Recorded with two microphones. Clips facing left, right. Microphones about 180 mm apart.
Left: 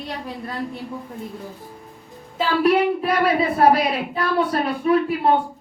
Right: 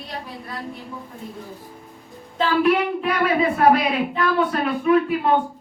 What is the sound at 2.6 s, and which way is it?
Speech, 35° left (ahead or behind).